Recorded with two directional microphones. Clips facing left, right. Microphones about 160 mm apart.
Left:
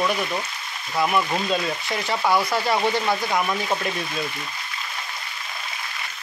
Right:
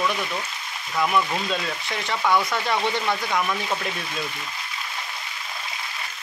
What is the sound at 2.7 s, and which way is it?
Speech, 5° left (ahead or behind).